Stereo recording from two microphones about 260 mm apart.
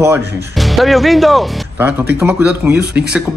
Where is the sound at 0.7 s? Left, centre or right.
Centre.